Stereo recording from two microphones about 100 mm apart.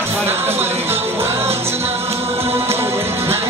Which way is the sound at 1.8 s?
90° right.